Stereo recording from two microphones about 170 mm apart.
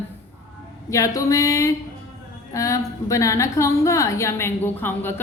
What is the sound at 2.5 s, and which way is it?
A woman's voice, 20° left (ahead or behind).